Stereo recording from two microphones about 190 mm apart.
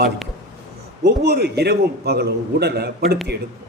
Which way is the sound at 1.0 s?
60° right (ahead or behind).